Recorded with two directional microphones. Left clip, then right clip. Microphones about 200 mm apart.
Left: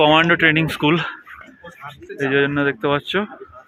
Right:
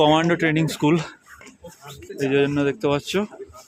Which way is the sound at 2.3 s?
10° right (ahead or behind).